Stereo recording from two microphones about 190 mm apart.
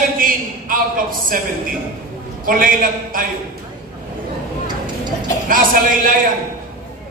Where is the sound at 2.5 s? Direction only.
45° right (ahead or behind).